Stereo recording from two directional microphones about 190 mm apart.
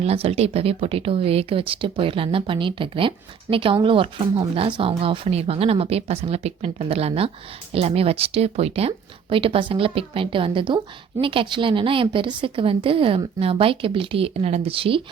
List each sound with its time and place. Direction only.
0.0 s a woman's voice: 30° right (ahead or behind)